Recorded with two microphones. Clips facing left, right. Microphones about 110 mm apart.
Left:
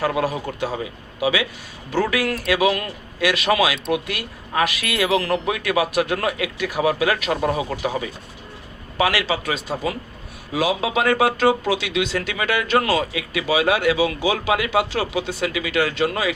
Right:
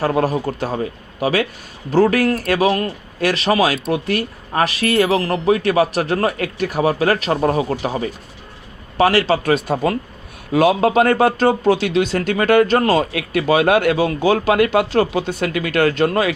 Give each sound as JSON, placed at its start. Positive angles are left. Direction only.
{"t": 0.0, "sound": "speech", "side_deg": -40}
{"t": 9.3, "sound": "speech", "side_deg": -50}